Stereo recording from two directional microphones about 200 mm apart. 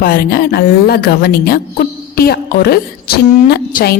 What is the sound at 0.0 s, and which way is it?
A woman's voice, 50° left (ahead or behind).